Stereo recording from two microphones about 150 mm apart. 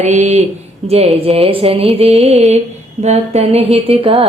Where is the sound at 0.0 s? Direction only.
50° right (ahead or behind).